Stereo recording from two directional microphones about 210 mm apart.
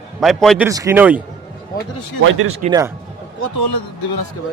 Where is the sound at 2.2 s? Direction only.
90° right.